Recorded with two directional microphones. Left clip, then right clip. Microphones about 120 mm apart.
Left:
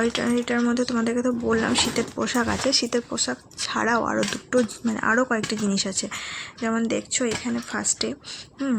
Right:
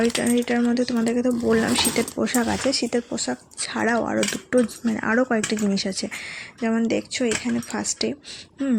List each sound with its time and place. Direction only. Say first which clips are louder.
0.0 s speech: right 2 dB; 20° right (ahead or behind)